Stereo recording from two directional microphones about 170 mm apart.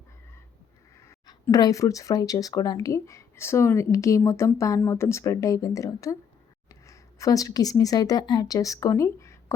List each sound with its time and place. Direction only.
1.0 s speech: 20° left (ahead or behind)